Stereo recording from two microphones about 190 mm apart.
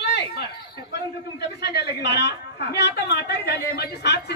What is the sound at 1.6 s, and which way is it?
A woman's voice, 60° left (ahead or behind).